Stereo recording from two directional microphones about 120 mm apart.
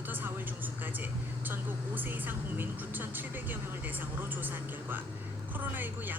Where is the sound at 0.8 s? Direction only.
15° right (ahead or behind).